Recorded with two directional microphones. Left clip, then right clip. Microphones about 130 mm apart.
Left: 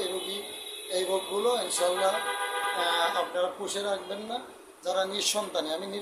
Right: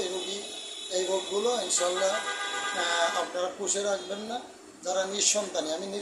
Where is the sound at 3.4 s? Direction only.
5° left (ahead or behind).